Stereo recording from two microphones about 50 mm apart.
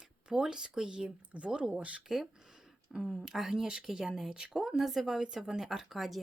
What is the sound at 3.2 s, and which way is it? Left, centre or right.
Speech, centre.